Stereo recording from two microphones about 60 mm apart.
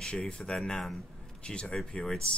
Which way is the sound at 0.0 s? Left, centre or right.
Centre.